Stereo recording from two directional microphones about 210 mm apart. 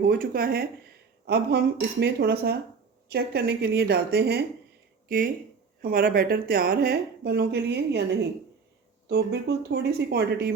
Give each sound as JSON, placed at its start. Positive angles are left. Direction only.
{"t": 0.1, "sound": "a woman's voice", "side_deg": -45}
{"t": 9.0, "sound": "a woman's voice", "side_deg": -50}